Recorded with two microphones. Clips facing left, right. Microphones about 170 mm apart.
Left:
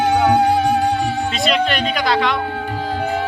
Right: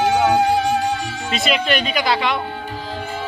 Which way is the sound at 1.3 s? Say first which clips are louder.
Right 3 dB; centre (ahead or behind).